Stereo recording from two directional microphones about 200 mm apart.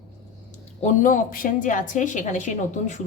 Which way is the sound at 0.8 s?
40° left (ahead or behind).